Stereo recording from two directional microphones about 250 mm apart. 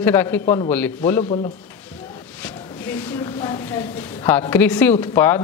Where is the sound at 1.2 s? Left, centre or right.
Left.